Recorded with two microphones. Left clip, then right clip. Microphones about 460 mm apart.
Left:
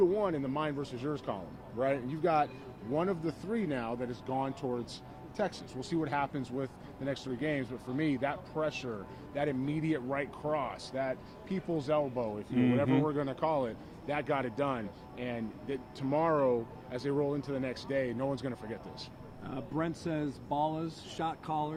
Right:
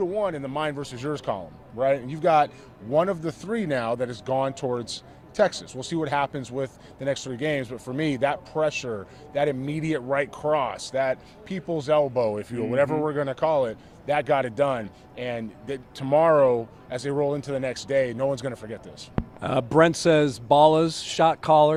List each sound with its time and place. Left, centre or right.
0.0 s a man's voice: centre
19.4 s speech: right